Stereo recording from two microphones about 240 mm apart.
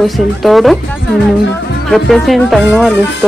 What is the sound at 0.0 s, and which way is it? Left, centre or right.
Music, centre.